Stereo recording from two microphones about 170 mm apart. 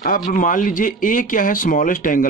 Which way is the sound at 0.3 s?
50° left (ahead or behind).